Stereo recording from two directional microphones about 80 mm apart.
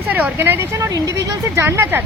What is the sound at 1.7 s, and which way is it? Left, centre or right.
Speech, right.